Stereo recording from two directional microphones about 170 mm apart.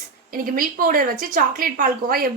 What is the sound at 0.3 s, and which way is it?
Speech, 55° right (ahead or behind).